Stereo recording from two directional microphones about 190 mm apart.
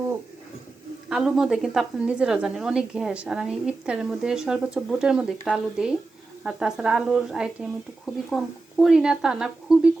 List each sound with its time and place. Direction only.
1.1 s speech: centre (ahead or behind)